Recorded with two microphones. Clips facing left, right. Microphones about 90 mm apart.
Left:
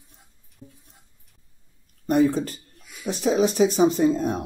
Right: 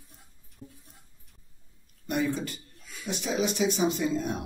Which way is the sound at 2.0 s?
40° left (ahead or behind).